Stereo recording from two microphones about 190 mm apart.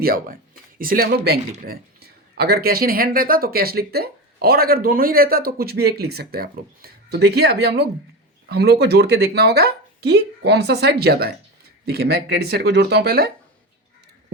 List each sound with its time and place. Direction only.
0.0 s speech: 50° right (ahead or behind)